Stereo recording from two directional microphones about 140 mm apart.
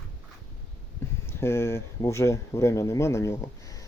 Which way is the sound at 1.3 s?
20° left (ahead or behind).